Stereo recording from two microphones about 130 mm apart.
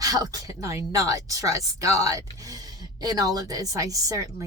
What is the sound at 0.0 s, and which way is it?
A woman's voice, 30° right (ahead or behind).